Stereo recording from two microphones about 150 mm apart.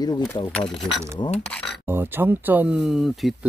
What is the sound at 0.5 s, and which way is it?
Speech, centre (ahead or behind).